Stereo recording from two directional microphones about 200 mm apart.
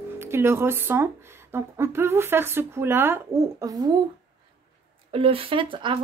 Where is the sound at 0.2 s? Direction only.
10° right (ahead or behind).